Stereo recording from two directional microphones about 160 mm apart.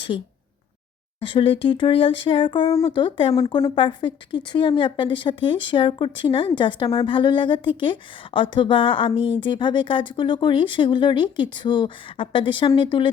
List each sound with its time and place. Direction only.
0.1 s a woman's voice: 35° left (ahead or behind)